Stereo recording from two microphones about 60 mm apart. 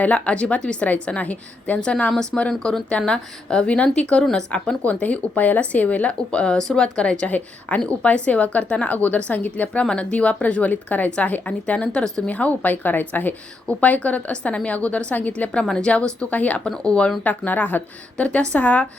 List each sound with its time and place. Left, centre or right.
0.0 s speech: left
2.5 s speech: centre
12.0 s speech: centre
12.3 s speech: left
16.6 s speech: centre
17.2 s speech: left